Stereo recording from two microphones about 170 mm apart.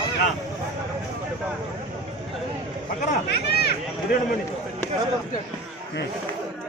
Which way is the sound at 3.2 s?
75° left (ahead or behind).